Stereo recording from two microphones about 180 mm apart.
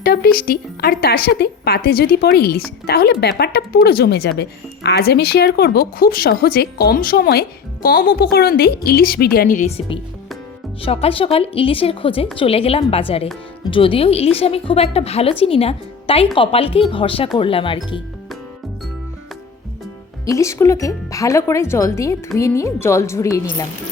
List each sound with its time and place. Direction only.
0.0 s a woman's voice: 60° left (ahead or behind); by 18.0 s 30° left (ahead or behind)
20.2 s speech: 15° left (ahead or behind)